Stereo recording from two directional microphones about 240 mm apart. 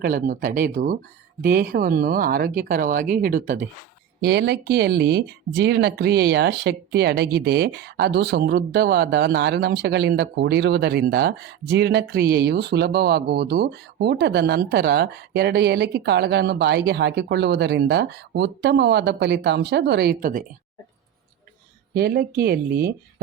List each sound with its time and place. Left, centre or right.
0.0 s speech: right
4.2 s speech: right
21.9 s speech: right